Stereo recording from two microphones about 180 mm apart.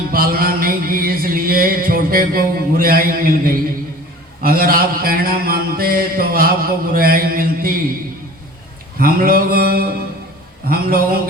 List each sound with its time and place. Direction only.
0.1 s music: 55° right (ahead or behind)
4.4 s mantra: 55° right (ahead or behind)
9.0 s music: 50° right (ahead or behind)